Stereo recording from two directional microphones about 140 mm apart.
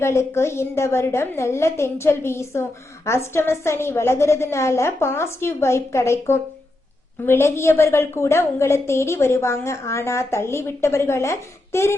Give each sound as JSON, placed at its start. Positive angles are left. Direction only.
{"t": 0.0, "sound": "a woman's voice", "side_deg": 20}